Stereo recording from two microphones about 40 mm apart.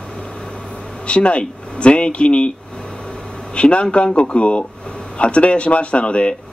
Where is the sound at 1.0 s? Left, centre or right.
Left.